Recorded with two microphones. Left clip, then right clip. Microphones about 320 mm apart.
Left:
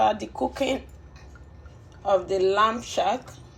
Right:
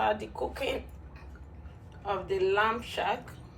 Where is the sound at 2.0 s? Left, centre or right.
Centre.